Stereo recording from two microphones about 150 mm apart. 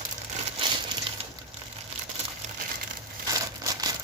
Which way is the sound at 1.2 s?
40° right (ahead or behind).